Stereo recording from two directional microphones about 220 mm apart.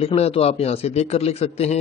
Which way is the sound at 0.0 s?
30° left (ahead or behind).